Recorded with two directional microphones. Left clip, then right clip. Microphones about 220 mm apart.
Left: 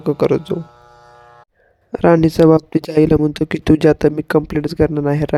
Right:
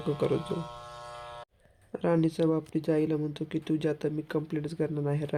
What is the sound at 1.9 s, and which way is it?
Speech, 45° left (ahead or behind).